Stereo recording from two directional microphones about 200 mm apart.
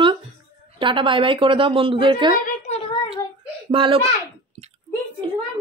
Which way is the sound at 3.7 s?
25° right (ahead or behind).